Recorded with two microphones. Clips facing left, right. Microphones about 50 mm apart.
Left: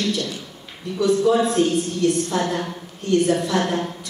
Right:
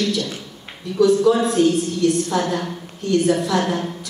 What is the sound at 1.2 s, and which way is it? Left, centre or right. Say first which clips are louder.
A woman's voice: right 2 dB; left.